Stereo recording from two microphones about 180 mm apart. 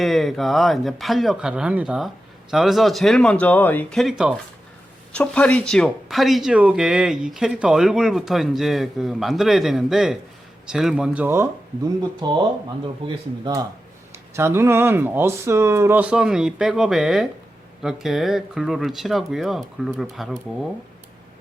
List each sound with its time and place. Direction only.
0.0 s speech: centre (ahead or behind)
12.2 s speech: 25° right (ahead or behind); by 20.4 s centre (ahead or behind)